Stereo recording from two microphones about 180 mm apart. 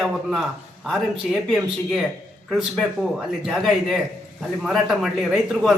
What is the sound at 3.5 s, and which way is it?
Speech, centre (ahead or behind).